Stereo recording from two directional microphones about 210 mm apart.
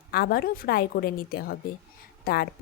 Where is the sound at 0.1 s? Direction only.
45° left (ahead or behind).